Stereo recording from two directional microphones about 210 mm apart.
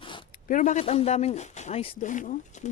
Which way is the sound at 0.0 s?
25° left (ahead or behind).